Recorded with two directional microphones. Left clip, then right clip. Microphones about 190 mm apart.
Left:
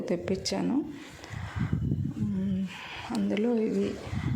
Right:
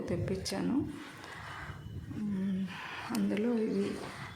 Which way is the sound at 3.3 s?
15° left (ahead or behind).